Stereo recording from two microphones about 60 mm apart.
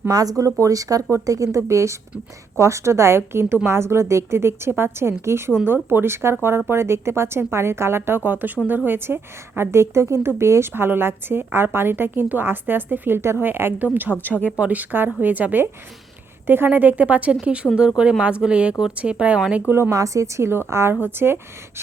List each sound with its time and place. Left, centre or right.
0.1 s speech: right
1.6 s a woman's voice: right
19.9 s a woman's voice: right